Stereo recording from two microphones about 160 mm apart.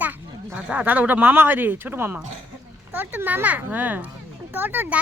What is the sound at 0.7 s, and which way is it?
Speech, 10° right (ahead or behind).